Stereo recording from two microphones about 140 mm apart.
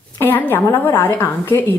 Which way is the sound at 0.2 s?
15° left (ahead or behind).